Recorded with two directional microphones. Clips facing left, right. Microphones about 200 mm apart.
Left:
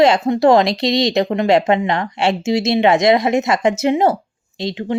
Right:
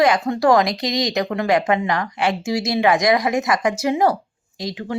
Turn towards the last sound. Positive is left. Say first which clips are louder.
# left 5 dB
turn(degrees=25)  # may be behind; listen again after turning